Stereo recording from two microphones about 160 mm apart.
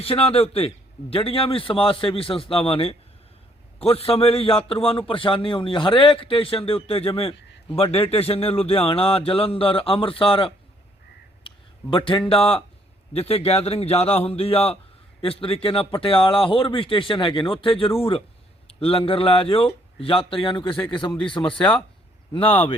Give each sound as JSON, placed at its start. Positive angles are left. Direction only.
{"t": 0.0, "sound": "a man's voice", "side_deg": 35}